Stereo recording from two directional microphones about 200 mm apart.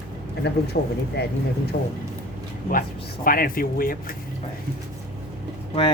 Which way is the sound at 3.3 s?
45° left (ahead or behind).